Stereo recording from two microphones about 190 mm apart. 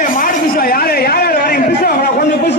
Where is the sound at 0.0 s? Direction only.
50° left (ahead or behind).